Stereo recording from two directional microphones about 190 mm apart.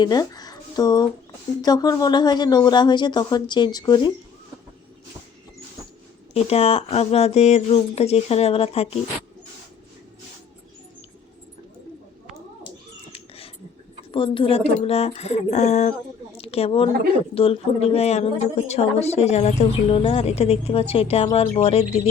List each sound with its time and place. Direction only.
0.0 s speech: 20° left (ahead or behind)
6.3 s a woman's voice: 30° left (ahead or behind)
13.1 s a sound: 30° left (ahead or behind)
14.1 s a woman's voice: 30° left (ahead or behind)